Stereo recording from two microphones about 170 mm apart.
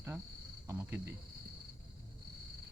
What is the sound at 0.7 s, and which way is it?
Speech, 15° right (ahead or behind).